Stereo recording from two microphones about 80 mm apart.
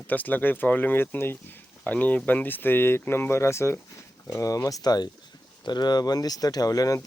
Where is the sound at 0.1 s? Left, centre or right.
Left.